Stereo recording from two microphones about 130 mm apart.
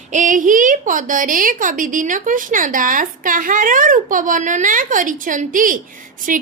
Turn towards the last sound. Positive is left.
turn(degrees=-85)